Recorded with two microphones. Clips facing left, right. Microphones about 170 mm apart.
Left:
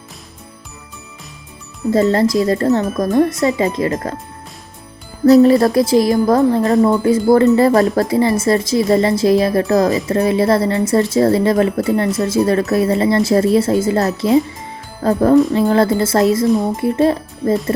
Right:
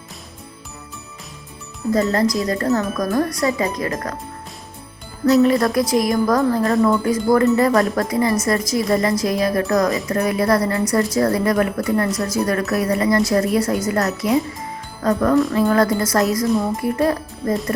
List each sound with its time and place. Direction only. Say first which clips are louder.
1.9 s a woman's voice: left 4 dB; 30° left (ahead or behind)
5.2 s a woman's voice: left 6 dB; 35° left (ahead or behind)